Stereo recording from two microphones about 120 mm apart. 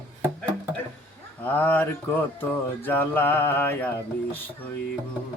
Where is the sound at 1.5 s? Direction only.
15° left (ahead or behind).